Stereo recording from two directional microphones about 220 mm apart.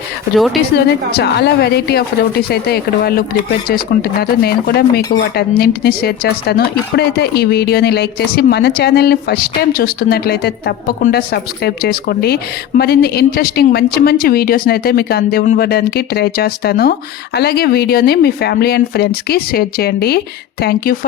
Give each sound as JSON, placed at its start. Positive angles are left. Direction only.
{"t": 0.3, "sound": "a woman's voice", "side_deg": 0}
{"t": 0.8, "sound": "speech", "side_deg": 45}